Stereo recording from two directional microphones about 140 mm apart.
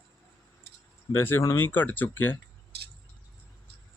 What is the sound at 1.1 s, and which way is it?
Speech, 15° left (ahead or behind).